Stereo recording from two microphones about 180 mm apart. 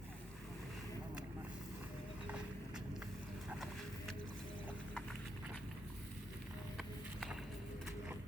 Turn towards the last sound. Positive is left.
turn(degrees=0)  # may be behind; listen again after turning